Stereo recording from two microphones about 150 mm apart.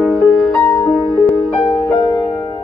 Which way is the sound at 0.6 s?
25° left (ahead or behind).